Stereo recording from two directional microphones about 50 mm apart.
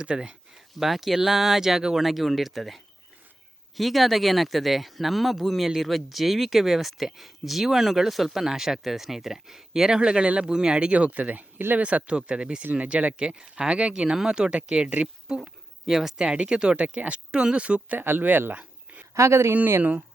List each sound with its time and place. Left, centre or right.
0.0 s speech: centre
0.7 s speech: centre; by 15.1 s right
15.9 s speech: centre
16.1 s speech: right
18.0 s speech: right
18.5 s a sound: right
19.1 s speech: right